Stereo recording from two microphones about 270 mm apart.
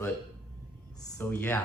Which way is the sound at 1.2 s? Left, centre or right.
Centre.